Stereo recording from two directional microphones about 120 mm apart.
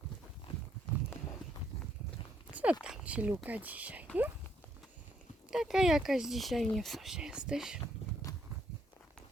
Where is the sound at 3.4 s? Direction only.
15° right (ahead or behind).